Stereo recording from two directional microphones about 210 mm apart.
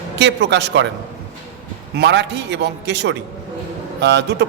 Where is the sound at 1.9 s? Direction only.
55° right (ahead or behind).